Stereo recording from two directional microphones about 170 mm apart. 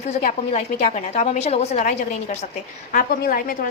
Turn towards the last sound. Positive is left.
turn(degrees=60)  # may be behind; listen again after turning